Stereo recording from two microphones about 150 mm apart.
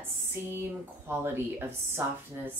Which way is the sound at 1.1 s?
15° right (ahead or behind).